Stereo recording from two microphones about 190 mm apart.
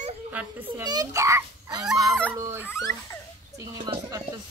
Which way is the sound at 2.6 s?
15° left (ahead or behind).